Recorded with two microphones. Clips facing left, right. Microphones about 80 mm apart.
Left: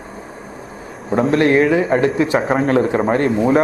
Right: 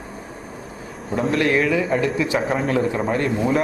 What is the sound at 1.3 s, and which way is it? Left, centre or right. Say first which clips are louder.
Speech: left 5 dB; left.